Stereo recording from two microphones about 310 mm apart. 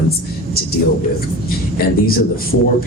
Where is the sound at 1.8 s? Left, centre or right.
Left.